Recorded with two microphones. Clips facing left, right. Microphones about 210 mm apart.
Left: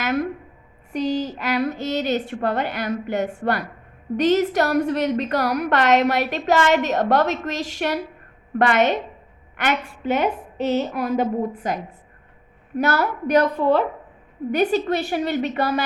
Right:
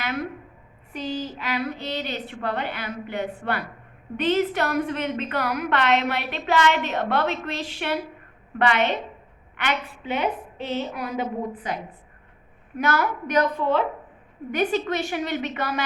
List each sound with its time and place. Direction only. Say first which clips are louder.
0.9 s a woman's voice: left 7 dB; 45° left (ahead or behind)